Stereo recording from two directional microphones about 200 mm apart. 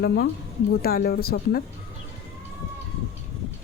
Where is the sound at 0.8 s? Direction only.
50° left (ahead or behind).